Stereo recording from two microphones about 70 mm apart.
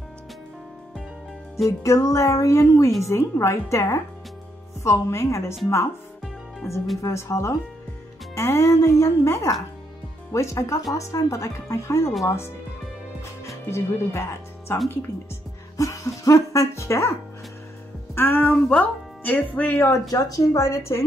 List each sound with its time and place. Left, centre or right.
1.7 s a woman's voice: left
6.7 s a woman's voice: left
13.5 s music: left
15.8 s a sound: left
18.1 s speech: left
20.1 s speech: left
20.5 s a woman's voice: left